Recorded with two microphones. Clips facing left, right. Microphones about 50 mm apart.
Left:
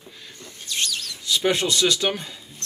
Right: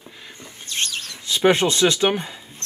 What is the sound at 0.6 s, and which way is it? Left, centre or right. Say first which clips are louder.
Speech: right 1 dB; right.